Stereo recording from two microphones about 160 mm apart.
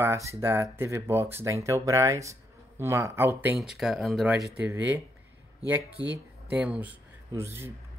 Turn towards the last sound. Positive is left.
turn(degrees=-15)  # may be behind; listen again after turning